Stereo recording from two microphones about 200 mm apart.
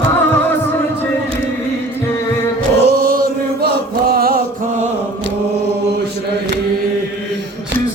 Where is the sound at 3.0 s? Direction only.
50° right (ahead or behind).